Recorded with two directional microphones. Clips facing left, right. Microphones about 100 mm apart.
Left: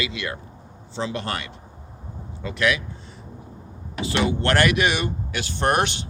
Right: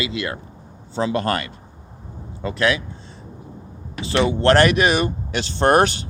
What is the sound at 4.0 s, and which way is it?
Speech, 30° right (ahead or behind).